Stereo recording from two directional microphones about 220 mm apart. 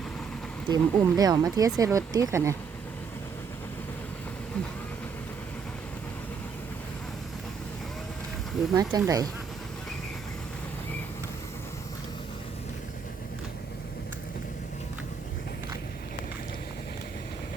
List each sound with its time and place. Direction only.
0.7 s speech: 15° right (ahead or behind)
8.7 s speech: 15° right (ahead or behind)